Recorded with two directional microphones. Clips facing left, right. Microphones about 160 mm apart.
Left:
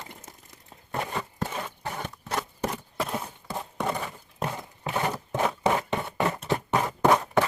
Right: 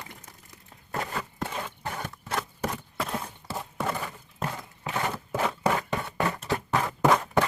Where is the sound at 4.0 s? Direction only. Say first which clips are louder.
Left 2 dB; 5° left (ahead or behind).